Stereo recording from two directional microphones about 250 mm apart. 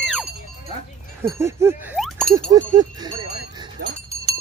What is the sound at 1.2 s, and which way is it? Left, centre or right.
Speech, centre.